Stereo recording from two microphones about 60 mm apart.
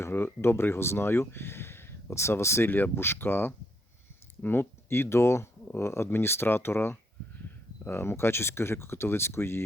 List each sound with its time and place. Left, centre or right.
0.0 s speech: left
2.6 s speech: left